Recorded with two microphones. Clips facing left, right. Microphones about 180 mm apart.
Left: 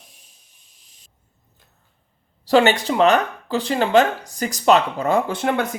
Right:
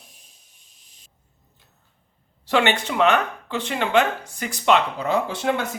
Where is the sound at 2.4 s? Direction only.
35° left (ahead or behind).